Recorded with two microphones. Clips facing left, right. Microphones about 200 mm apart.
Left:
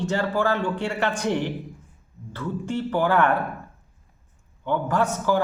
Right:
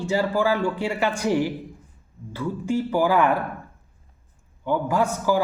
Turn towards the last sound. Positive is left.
turn(degrees=-10)  # may be behind; listen again after turning